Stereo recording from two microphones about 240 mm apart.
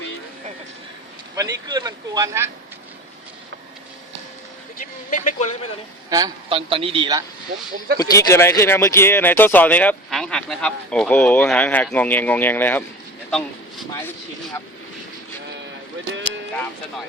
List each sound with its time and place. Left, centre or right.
1.4 s speech: centre
4.8 s a man's voice: left
6.1 s a man's voice: centre
7.9 s speech: centre